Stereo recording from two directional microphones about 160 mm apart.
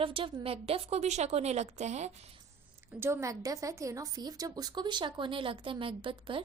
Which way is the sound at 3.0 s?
15° right (ahead or behind).